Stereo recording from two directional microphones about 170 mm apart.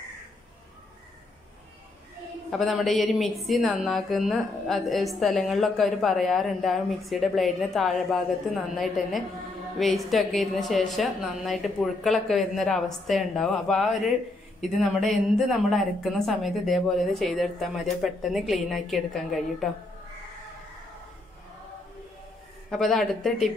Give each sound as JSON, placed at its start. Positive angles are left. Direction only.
{"t": 2.5, "sound": "a woman's voice", "side_deg": 0}
{"t": 22.7, "sound": "a woman's voice", "side_deg": 0}